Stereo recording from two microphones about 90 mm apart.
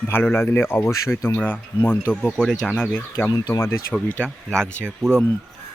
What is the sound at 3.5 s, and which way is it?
Speech, 30° left (ahead or behind).